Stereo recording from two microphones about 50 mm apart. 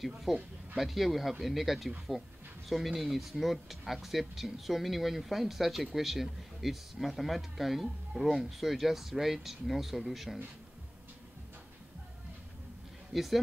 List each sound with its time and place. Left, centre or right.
0.0 s speech: centre
13.1 s speech: centre